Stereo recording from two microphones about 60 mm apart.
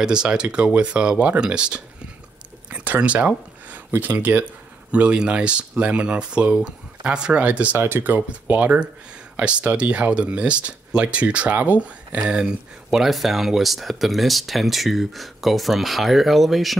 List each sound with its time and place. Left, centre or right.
0.0 s speech: centre
7.7 s speech: right
8.3 s speech: right; by 16.7 s centre